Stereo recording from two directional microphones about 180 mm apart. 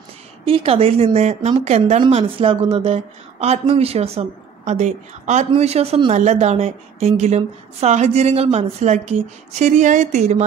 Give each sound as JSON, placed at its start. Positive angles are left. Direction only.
{"t": 0.5, "sound": "speech", "side_deg": -30}